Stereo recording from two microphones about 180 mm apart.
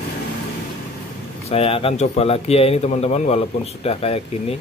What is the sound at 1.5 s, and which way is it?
Speech, 35° left (ahead or behind).